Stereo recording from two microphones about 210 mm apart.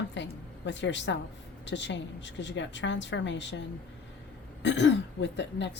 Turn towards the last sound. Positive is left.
turn(degrees=55)  # may be behind; listen again after turning